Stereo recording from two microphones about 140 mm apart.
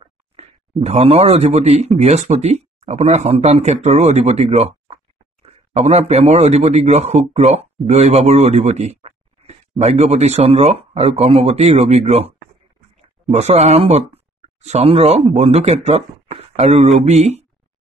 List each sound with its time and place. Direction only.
0.0 s speech: 45° right (ahead or behind)
13.3 s speech: 50° right (ahead or behind)